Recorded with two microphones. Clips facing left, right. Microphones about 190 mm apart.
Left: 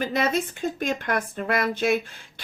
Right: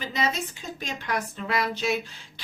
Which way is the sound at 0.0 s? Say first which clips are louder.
Left 5 dB; 55° left (ahead or behind).